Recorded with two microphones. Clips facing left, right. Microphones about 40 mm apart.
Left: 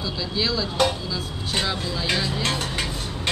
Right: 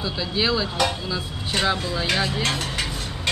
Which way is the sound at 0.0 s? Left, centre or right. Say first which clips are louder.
Right 2 dB; right.